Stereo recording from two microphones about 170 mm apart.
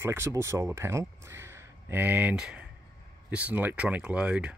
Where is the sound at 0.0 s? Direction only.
15° right (ahead or behind).